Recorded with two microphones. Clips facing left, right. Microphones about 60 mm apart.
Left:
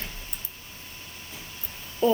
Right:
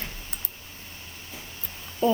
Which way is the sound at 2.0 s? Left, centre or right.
Centre.